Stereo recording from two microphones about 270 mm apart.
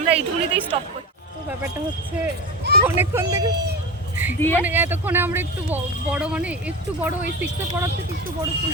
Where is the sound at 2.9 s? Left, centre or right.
Centre.